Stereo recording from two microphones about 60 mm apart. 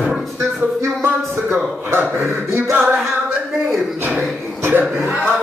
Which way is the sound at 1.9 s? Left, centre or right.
Right.